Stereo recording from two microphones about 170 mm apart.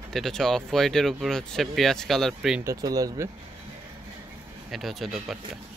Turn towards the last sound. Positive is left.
turn(degrees=0)  # may be behind; listen again after turning